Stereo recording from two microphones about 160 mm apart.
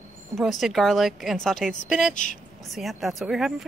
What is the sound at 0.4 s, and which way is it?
A woman's voice, centre (ahead or behind).